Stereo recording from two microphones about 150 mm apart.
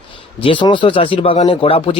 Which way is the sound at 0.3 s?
35° left (ahead or behind).